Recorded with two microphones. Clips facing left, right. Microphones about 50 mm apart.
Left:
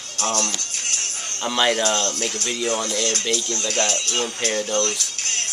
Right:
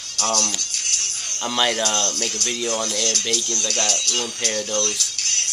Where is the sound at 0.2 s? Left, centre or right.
Left.